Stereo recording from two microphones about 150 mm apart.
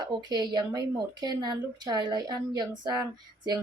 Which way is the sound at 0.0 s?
30° right (ahead or behind).